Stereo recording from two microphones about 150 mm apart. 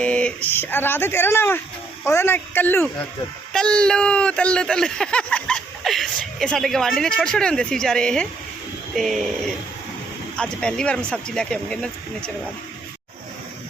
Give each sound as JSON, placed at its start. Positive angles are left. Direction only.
{"t": 0.0, "sound": "speech", "side_deg": 10}
{"t": 10.3, "sound": "speech", "side_deg": 5}